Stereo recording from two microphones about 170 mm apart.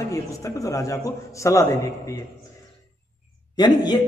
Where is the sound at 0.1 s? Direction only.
20° left (ahead or behind).